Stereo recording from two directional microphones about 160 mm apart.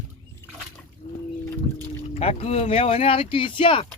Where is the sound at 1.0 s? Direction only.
40° left (ahead or behind).